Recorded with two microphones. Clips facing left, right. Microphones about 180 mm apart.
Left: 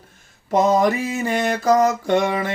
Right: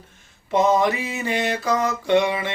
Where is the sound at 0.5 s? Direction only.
40° left (ahead or behind).